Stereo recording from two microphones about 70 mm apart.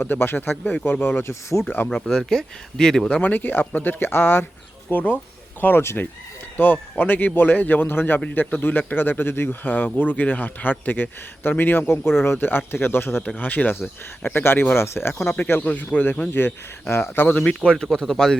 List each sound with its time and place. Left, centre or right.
0.0 s speech: left
1.9 s speech: centre
3.2 s speech: left
13.2 s speech: left
16.9 s speech: left
17.3 s speech: centre